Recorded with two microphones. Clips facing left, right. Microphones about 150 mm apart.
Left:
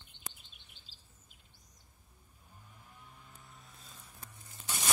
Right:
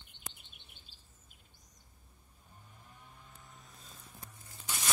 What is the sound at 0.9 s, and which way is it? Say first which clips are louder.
Chirp: even; 55° right (ahead or behind).